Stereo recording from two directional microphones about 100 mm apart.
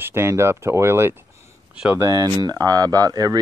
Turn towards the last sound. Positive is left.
turn(degrees=-35)  # may be behind; listen again after turning